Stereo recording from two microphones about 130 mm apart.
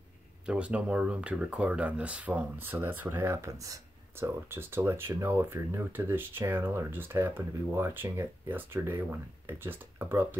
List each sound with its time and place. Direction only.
0.5 s speech: 10° right (ahead or behind)